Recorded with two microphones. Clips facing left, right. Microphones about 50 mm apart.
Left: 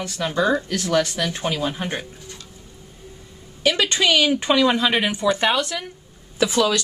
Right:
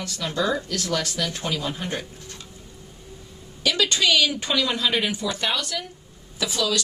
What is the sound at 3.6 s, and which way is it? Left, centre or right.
Speech, left.